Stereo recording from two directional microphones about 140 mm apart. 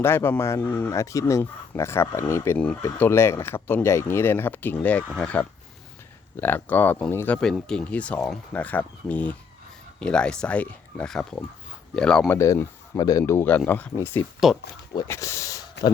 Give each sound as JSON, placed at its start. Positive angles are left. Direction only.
{"t": 0.0, "sound": "speech", "side_deg": 15}
{"t": 12.4, "sound": "speech", "side_deg": 20}